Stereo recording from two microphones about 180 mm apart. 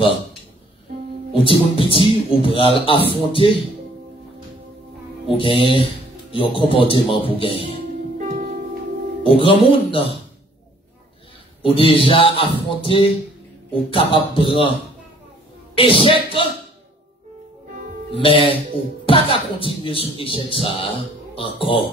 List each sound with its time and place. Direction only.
1.3 s speech: 30° left (ahead or behind)
5.4 s speech: 30° left (ahead or behind)
8.2 s music: 40° right (ahead or behind)
9.2 s speech: 30° left (ahead or behind)
11.6 s speech: 30° left (ahead or behind)
15.7 s speech: 30° left (ahead or behind)
18.1 s speech: 30° left (ahead or behind)